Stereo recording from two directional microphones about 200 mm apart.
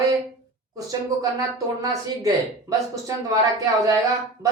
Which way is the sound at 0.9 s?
20° right (ahead or behind).